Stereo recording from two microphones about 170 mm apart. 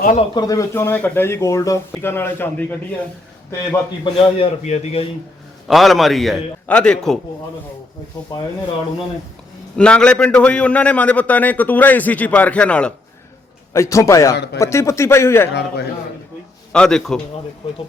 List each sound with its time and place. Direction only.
0.0 s a man's voice: 50° left (ahead or behind)
0.3 s a man's voice: 20° left (ahead or behind)
4.0 s a man's voice: 40° left (ahead or behind)
5.6 s a man's voice: centre (ahead or behind)
9.7 s a man's voice: 5° left (ahead or behind)
13.7 s a man's voice: 15° left (ahead or behind)
14.3 s speech: 80° left
14.6 s a man's voice: 15° left (ahead or behind)
16.7 s a man's voice: 5° left (ahead or behind)